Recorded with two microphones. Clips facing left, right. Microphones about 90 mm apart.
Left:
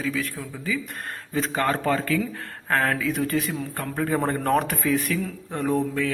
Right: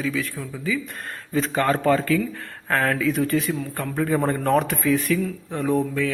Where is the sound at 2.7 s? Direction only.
10° left (ahead or behind).